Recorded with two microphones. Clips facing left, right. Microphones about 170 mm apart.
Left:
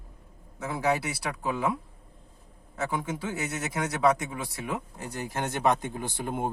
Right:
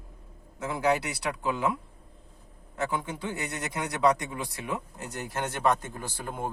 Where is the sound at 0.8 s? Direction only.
5° left (ahead or behind).